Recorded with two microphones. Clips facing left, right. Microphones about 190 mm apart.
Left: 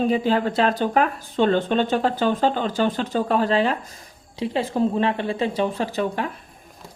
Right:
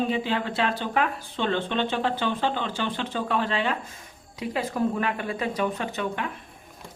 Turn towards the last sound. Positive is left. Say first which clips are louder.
# left 5 dB
turn(degrees=35)  # may be behind; listen again after turning